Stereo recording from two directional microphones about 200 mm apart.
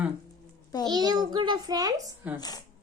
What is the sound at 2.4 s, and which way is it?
Speech, 20° left (ahead or behind).